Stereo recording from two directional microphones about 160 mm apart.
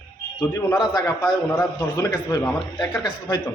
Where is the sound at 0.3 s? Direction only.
25° left (ahead or behind).